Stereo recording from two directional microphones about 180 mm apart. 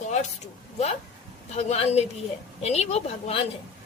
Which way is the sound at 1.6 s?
35° left (ahead or behind).